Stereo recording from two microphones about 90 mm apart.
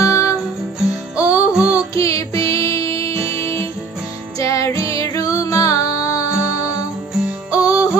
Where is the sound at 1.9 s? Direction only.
35° left (ahead or behind).